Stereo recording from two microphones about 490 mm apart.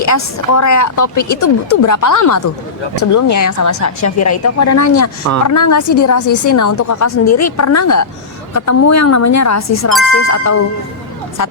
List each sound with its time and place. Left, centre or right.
0.0 s speech: left